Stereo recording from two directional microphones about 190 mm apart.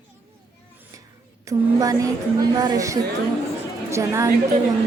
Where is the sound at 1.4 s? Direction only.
15° right (ahead or behind).